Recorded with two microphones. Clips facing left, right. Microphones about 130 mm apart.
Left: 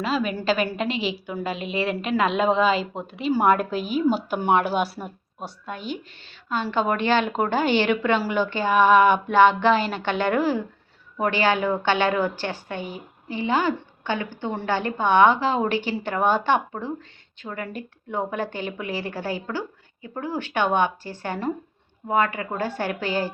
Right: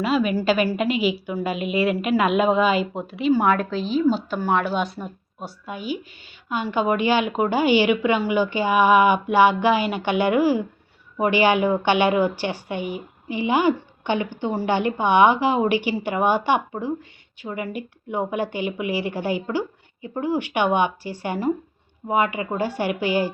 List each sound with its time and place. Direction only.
0.0 s a woman's voice: 5° right (ahead or behind)
3.3 s a woman's voice: 10° left (ahead or behind); by 23.3 s 15° right (ahead or behind)